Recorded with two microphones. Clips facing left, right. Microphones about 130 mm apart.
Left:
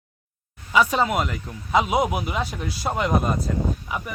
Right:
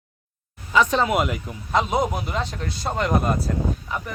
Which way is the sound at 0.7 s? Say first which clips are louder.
Even; 10° left (ahead or behind).